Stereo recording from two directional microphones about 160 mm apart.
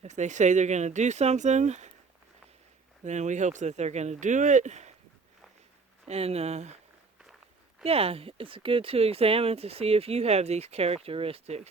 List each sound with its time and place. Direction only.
0.0 s speech: 50° right (ahead or behind)
3.0 s speech: 50° right (ahead or behind)
6.1 s speech: 40° right (ahead or behind)
7.9 s speech: 40° right (ahead or behind)